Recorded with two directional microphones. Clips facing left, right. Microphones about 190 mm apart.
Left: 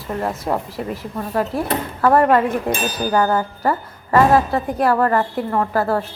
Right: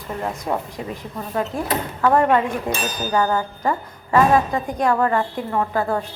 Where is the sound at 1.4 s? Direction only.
5° left (ahead or behind).